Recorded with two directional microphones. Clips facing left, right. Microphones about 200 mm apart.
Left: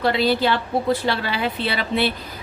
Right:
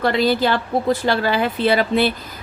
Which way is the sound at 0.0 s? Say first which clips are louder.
Right 2 dB; 45° right (ahead or behind).